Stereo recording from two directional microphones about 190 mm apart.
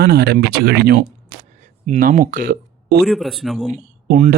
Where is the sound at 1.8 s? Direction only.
40° right (ahead or behind).